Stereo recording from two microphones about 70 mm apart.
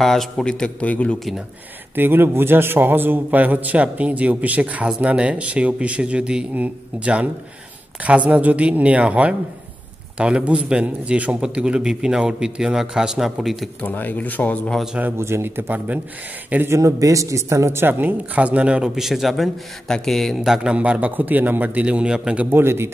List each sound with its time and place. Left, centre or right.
0.0 s a man's voice: centre
2.0 s a man's voice: right; by 13.7 s centre
13.7 s speech: left
15.1 s speech: right
16.6 s speech: right; by 19.0 s centre
19.0 s a man's voice: centre
20.7 s a man's voice: centre
22.5 s speech: right